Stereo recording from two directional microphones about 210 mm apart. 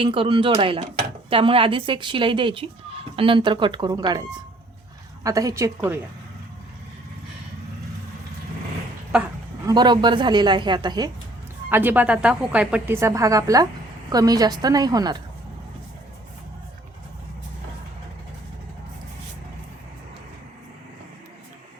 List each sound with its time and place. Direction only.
0.0 s a woman's voice: 25° right (ahead or behind)
9.1 s a sound: 10° right (ahead or behind)
9.7 s a woman's voice: 20° right (ahead or behind)
11.7 s a woman's voice: 10° right (ahead or behind)